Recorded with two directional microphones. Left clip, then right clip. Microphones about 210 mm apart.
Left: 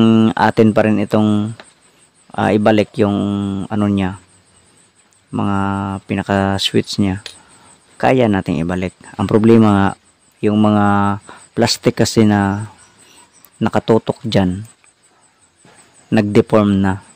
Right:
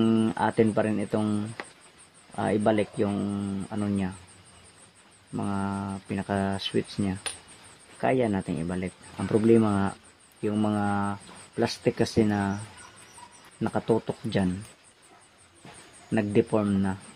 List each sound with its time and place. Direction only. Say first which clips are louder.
0.0 s speech: left 12 dB; 55° left (ahead or behind)
5.3 s speech: left 13 dB; 55° left (ahead or behind)
16.1 s speech: left 12 dB; 55° left (ahead or behind)